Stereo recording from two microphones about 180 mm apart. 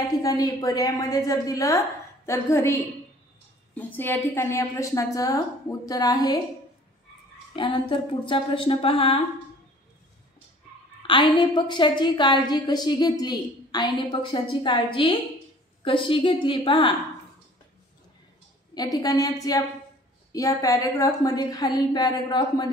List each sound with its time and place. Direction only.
0.2 s a woman's voice: 20° left (ahead or behind)
7.5 s a woman's voice: 30° left (ahead or behind)
11.0 s a woman's voice: 30° left (ahead or behind)
18.8 s a woman's voice: 20° left (ahead or behind)
20.3 s a woman's voice: 20° left (ahead or behind)